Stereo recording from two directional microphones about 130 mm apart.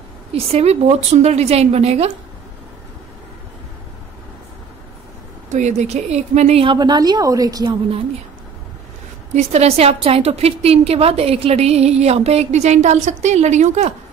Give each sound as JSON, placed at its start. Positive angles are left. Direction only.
{"t": 0.3, "sound": "a woman's voice", "side_deg": -50}
{"t": 5.5, "sound": "a woman's voice", "side_deg": -65}
{"t": 6.6, "sound": "a woman's voice", "side_deg": -35}
{"t": 9.3, "sound": "a woman's voice", "side_deg": -55}